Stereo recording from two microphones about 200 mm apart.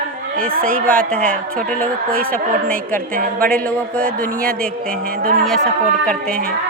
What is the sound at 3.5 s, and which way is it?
Speech, 5° left (ahead or behind).